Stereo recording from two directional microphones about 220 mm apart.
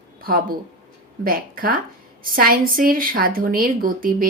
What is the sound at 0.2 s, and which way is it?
Speech, 40° right (ahead or behind).